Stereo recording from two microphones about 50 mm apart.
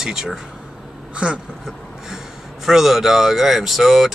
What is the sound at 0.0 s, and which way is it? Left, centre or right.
Speech, centre.